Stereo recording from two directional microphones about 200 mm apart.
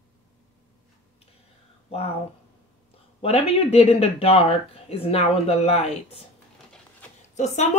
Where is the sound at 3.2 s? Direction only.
30° left (ahead or behind).